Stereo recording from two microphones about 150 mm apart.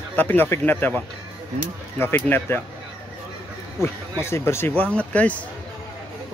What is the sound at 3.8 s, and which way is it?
Speech, 15° left (ahead or behind).